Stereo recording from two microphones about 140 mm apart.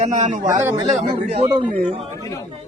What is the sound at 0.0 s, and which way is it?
Speech, 60° right (ahead or behind).